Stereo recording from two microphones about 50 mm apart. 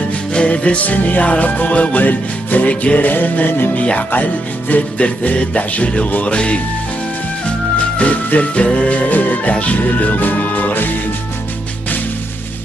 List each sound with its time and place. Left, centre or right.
0.3 s music: left
6.2 s speech: left
8.0 s music: left